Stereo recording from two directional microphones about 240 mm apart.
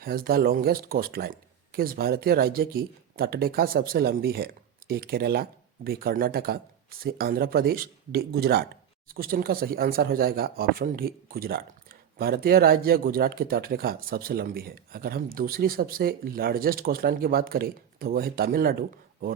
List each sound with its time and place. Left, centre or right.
0.0 s speech: right